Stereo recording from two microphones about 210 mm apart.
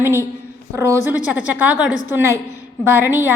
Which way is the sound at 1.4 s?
5° right (ahead or behind).